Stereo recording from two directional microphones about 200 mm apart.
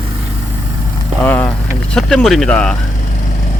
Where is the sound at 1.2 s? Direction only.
10° left (ahead or behind).